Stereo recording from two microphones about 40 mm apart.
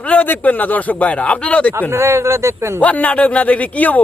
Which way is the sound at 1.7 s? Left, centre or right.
Right.